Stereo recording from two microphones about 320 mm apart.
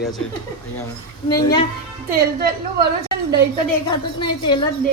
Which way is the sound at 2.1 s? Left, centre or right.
Right.